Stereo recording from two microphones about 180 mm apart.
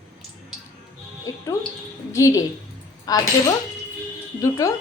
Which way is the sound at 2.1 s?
15° left (ahead or behind).